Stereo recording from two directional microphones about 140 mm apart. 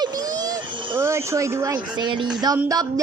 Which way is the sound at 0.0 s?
25° right (ahead or behind).